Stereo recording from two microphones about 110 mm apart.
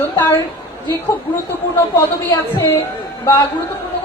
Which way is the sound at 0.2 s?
25° left (ahead or behind).